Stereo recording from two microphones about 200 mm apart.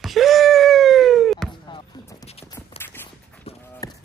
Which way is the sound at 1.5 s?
25° left (ahead or behind).